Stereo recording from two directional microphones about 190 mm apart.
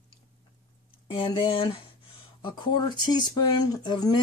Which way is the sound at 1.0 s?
25° left (ahead or behind).